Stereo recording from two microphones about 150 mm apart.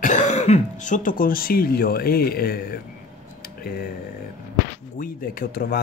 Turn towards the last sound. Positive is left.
turn(degrees=70)  # may be behind; listen again after turning